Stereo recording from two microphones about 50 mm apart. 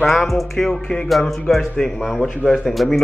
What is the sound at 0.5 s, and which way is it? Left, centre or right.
Music, centre.